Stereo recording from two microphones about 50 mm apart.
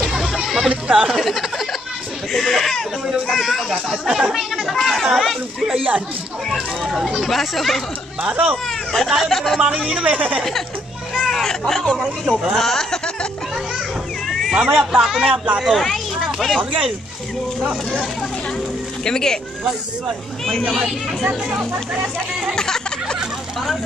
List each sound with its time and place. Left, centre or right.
0.1 s chatter: centre
0.7 s speech: right
1.0 s speech: centre
7.0 s speech: centre
7.2 s speech: centre
8.2 s a woman's voice: right
8.9 s speech: centre
9.9 s a woman's voice: right
11.2 s speech: centre
14.5 s speech: centre
19.0 s speech: centre
21.2 s speech: centre
22.6 s a sound: centre